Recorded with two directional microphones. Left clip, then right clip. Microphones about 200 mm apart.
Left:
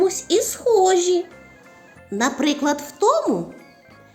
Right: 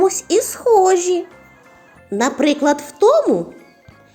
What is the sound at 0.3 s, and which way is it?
Speech, 15° right (ahead or behind).